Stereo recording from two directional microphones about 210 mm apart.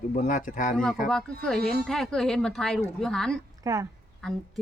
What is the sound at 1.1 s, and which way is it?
Speech, 5° left (ahead or behind).